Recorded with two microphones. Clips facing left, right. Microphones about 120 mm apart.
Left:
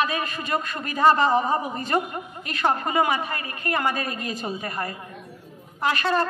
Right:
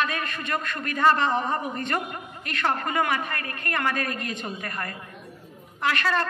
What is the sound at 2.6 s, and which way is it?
A man's voice, 25° left (ahead or behind).